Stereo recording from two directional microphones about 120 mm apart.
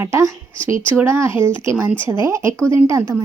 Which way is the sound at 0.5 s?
45° left (ahead or behind).